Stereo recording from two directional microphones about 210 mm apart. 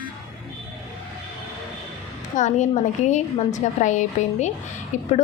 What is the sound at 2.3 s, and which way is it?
A woman's voice, 35° left (ahead or behind).